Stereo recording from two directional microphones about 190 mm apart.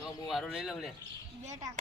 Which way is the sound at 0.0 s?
Centre (ahead or behind).